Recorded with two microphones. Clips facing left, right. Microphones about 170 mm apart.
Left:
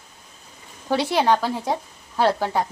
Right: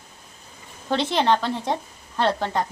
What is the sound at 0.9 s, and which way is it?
Speech, 10° left (ahead or behind).